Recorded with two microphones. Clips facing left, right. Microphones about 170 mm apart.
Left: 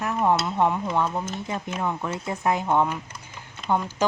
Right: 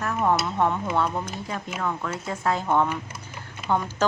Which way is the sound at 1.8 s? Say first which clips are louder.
Even; 20° left (ahead or behind).